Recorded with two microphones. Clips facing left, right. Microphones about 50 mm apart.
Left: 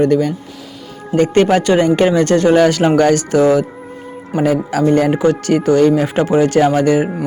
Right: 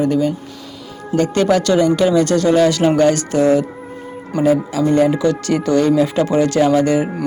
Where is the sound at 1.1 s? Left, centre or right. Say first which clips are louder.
Left 3 dB; left.